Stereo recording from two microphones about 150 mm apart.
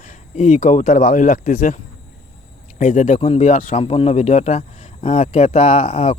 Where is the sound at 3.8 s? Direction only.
40° left (ahead or behind).